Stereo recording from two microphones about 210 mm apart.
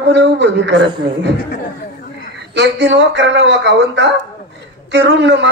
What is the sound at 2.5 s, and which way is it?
A man's voice, 55° right (ahead or behind).